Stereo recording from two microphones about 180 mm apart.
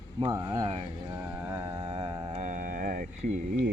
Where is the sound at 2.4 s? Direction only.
50° right (ahead or behind).